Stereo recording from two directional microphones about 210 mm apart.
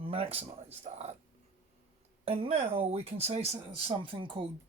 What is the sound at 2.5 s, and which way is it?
Speech, 25° right (ahead or behind).